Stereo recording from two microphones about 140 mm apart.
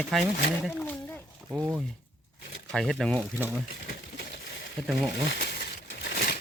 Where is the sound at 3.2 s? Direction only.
10° right (ahead or behind).